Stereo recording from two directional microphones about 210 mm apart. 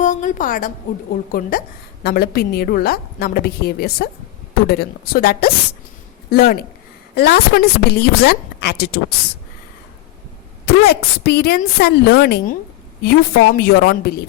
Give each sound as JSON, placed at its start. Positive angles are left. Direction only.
{"t": 0.0, "sound": "a woman's voice", "side_deg": 35}
{"t": 10.7, "sound": "a woman's voice", "side_deg": 50}